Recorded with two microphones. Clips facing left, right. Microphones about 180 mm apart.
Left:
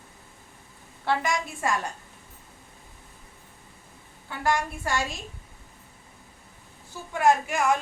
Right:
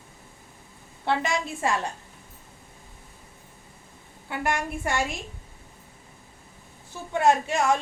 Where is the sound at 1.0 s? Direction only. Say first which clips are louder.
Right 1 dB; 20° right (ahead or behind).